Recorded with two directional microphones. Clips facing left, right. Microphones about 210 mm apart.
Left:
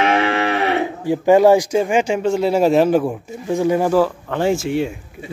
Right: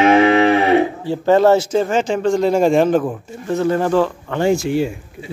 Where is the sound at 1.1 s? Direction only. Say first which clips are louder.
Left 2 dB; 10° left (ahead or behind).